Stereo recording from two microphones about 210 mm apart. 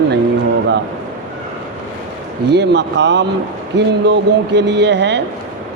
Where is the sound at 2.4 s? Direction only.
55° right (ahead or behind).